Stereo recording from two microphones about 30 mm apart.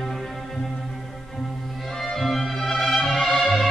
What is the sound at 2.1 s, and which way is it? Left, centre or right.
Music, centre.